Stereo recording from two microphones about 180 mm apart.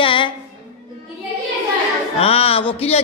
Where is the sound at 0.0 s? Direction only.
30° left (ahead or behind).